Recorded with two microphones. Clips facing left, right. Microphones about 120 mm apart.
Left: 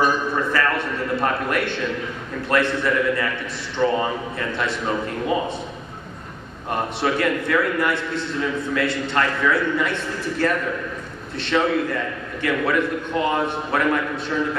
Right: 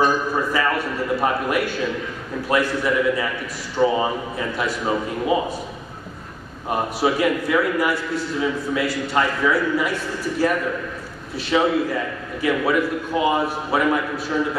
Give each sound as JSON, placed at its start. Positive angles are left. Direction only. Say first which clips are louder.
{"t": 0.0, "sound": "a sound", "louder": "right 1 dB", "side_deg": -5}
{"t": 2.4, "sound": "a man's voice", "louder": "even", "side_deg": -5}
{"t": 6.7, "sound": "a man's voice", "louder": "right 2 dB", "side_deg": -5}